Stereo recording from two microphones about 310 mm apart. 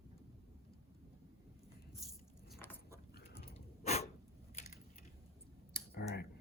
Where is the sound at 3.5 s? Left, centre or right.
Left.